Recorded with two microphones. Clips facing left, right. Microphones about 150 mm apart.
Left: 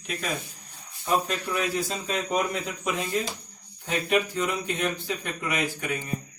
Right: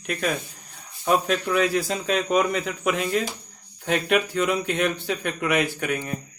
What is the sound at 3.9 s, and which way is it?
Speech, 75° right (ahead or behind).